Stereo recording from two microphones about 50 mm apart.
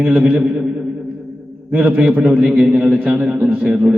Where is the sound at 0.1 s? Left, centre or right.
Centre.